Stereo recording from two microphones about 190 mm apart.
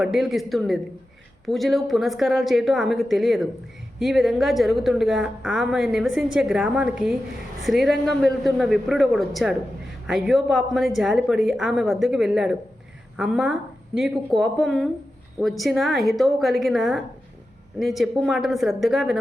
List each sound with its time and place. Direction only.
0.0 s a woman's voice: centre (ahead or behind)